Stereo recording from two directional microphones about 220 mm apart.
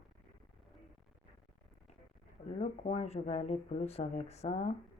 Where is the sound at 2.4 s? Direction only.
30° left (ahead or behind).